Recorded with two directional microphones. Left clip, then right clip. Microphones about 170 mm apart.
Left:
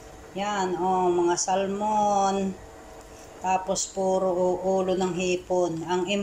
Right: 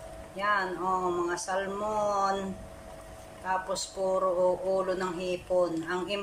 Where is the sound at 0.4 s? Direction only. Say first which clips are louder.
Left 2 dB; 10° left (ahead or behind).